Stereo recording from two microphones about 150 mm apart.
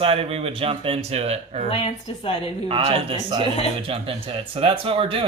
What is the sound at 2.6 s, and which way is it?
Speech, 40° right (ahead or behind).